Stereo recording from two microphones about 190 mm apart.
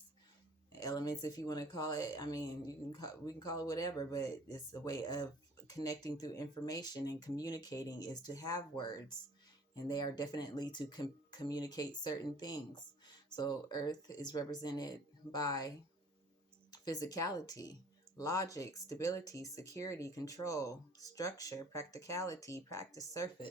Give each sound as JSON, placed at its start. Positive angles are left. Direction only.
{"t": 0.8, "sound": "speech", "side_deg": 20}
{"t": 16.7, "sound": "speech", "side_deg": 20}